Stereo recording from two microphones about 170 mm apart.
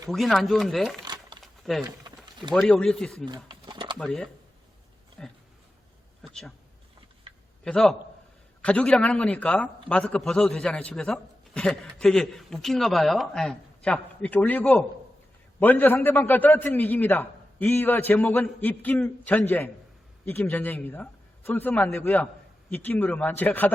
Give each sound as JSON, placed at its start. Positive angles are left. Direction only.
{"t": 0.1, "sound": "a man's voice", "side_deg": 0}
{"t": 1.0, "sound": "a sound", "side_deg": -25}
{"t": 1.7, "sound": "a man's voice", "side_deg": 0}
{"t": 3.2, "sound": "a sound", "side_deg": -25}
{"t": 3.9, "sound": "a man's voice", "side_deg": 5}
{"t": 7.6, "sound": "a man's voice", "side_deg": 5}